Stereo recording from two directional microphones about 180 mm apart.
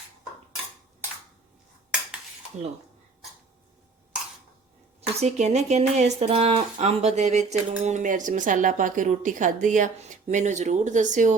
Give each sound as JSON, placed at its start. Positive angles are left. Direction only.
{"t": 4.9, "sound": "speech", "side_deg": -35}